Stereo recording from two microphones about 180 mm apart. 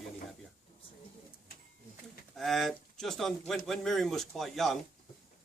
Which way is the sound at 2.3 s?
Centre (ahead or behind).